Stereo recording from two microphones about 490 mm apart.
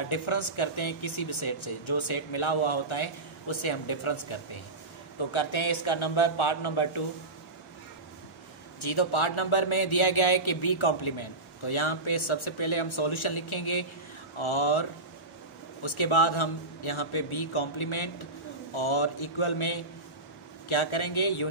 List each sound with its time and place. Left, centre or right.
0.0 s a man's voice: left
8.8 s a man's voice: left